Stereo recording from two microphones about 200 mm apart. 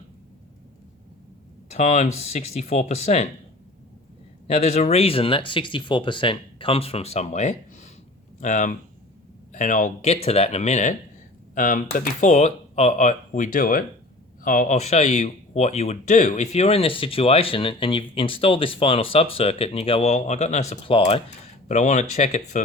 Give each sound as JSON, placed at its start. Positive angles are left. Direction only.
{"t": 1.7, "sound": "speech", "side_deg": 35}
{"t": 4.4, "sound": "speech", "side_deg": 30}